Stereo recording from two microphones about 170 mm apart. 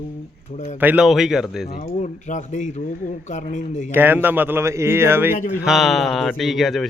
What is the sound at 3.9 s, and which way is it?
A man's voice, 10° right (ahead or behind).